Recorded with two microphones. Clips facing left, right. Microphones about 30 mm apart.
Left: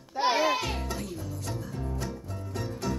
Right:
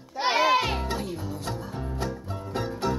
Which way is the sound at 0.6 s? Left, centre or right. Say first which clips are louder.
Right 5 dB; right.